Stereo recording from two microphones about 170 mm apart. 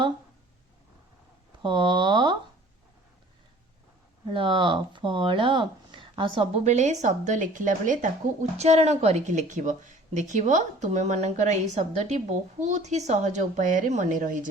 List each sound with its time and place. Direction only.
1.6 s speech: 30° right (ahead or behind)
4.3 s a woman's voice: 30° right (ahead or behind); by 14.4 s 50° right (ahead or behind)